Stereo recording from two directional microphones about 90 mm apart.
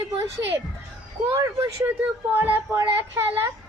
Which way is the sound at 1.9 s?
20° right (ahead or behind).